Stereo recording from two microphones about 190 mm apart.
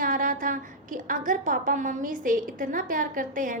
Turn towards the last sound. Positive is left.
turn(degrees=-45)  # may be behind; listen again after turning